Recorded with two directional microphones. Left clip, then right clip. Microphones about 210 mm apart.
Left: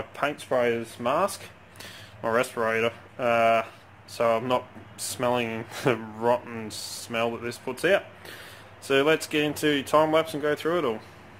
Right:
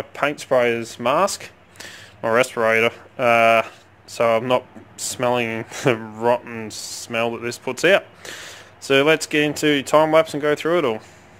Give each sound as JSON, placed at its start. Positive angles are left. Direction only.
{"t": 0.1, "sound": "speech", "side_deg": -30}
{"t": 0.5, "sound": "speech", "side_deg": -50}